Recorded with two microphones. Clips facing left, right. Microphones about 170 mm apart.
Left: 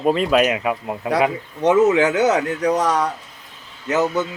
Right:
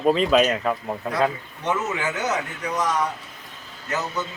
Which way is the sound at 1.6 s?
90° left.